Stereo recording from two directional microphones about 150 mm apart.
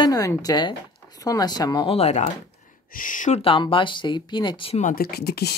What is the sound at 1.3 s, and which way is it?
Speech, 20° left (ahead or behind).